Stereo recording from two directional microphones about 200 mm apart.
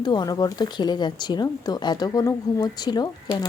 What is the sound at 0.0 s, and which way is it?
Speech, 20° left (ahead or behind).